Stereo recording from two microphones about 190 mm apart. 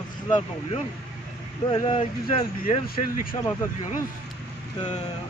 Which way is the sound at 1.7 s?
25° left (ahead or behind).